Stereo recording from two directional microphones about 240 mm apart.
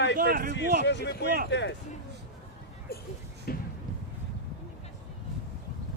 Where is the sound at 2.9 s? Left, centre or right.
Left.